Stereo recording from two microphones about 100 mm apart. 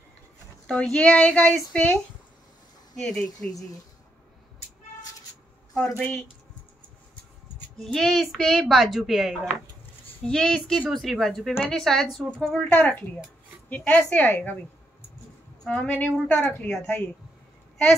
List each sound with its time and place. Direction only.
0.7 s speech: 10° left (ahead or behind)
3.0 s speech: 5° left (ahead or behind)
5.8 s speech: 5° left (ahead or behind)
7.8 s speech: centre (ahead or behind)
10.2 s speech: 10° left (ahead or behind)
12.6 s speech: 15° left (ahead or behind)
15.6 s speech: 10° left (ahead or behind)